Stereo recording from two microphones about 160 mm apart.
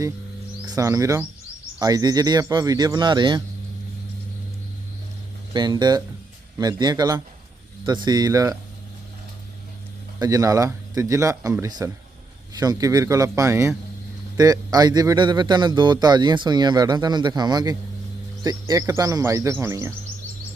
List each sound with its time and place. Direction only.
0.7 s speech: 20° right (ahead or behind)
5.5 s speech: 25° right (ahead or behind)
10.2 s speech: 20° right (ahead or behind)